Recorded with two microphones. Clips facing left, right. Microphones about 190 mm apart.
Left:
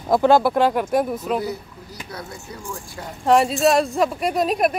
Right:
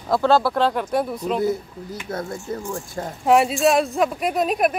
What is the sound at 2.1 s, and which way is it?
Speech, 50° right (ahead or behind).